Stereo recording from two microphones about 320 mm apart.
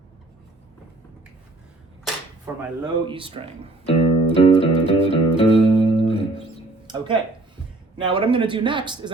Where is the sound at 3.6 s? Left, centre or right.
Centre.